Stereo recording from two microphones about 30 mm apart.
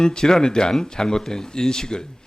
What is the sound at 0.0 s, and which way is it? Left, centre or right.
Speech, left.